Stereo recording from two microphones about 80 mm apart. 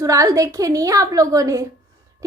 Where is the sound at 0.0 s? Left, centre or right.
Right.